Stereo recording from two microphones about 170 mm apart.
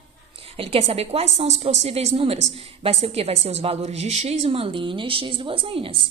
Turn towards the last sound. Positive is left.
turn(degrees=-30)  # may be behind; listen again after turning